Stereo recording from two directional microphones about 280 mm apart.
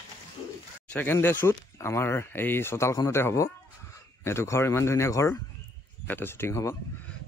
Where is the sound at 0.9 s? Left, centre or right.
Centre.